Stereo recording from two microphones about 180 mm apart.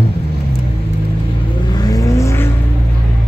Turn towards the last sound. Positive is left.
turn(degrees=15)  # may be behind; listen again after turning